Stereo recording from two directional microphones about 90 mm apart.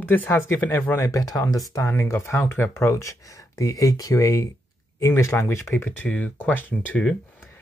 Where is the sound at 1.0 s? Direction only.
40° left (ahead or behind).